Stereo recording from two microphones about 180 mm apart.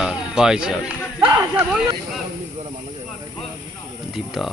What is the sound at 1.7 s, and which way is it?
Speech, 5° right (ahead or behind).